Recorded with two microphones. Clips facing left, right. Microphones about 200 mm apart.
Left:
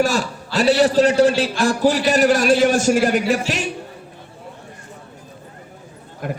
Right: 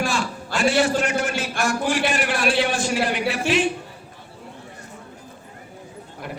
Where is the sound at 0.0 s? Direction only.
40° left (ahead or behind).